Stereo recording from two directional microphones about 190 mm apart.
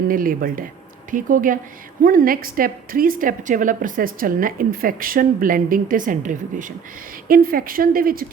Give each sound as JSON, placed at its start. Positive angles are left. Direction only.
{"t": 0.1, "sound": "a woman's voice", "side_deg": -50}